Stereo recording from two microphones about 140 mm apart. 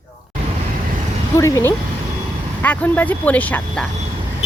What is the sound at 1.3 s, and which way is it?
Speech, 25° left (ahead or behind).